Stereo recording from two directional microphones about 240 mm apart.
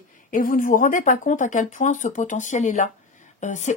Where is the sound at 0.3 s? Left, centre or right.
Left.